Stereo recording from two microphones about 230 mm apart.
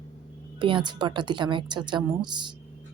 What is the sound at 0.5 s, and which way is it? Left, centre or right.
A woman's voice, right.